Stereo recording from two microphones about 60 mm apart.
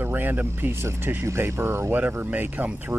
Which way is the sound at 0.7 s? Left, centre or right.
Right.